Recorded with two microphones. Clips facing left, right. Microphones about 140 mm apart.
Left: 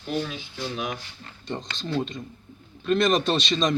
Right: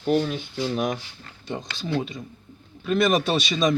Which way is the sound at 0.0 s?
50° right (ahead or behind).